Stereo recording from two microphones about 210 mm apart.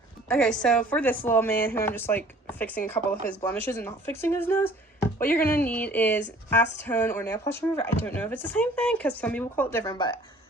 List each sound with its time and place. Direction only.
0.3 s a woman's voice: 5° left (ahead or behind); by 10.2 s 20° left (ahead or behind)